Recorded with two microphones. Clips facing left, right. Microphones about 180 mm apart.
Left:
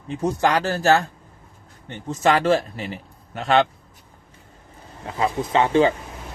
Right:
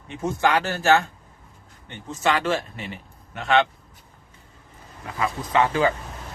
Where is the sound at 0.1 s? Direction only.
35° left (ahead or behind).